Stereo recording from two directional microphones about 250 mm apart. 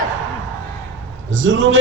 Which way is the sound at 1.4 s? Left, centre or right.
Right.